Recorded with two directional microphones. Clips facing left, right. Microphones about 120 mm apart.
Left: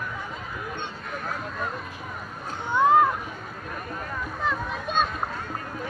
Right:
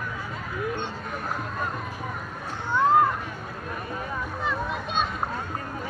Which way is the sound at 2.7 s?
15° left (ahead or behind).